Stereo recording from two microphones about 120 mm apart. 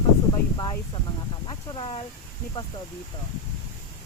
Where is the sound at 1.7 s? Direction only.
45° left (ahead or behind).